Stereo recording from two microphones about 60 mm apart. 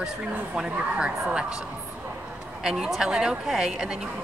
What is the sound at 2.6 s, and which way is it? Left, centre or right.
A woman's voice, centre.